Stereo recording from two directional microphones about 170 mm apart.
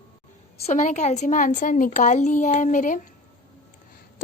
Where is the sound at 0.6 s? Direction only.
45° left (ahead or behind).